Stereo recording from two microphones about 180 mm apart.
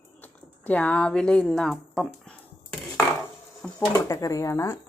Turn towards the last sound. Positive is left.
turn(degrees=15)  # may be behind; listen again after turning